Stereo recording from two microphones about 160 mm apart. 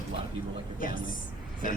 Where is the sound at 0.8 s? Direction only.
60° left (ahead or behind).